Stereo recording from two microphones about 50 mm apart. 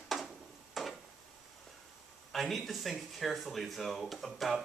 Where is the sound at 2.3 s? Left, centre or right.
Centre.